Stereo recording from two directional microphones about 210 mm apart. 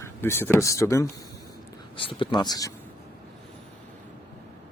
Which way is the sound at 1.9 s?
25° left (ahead or behind).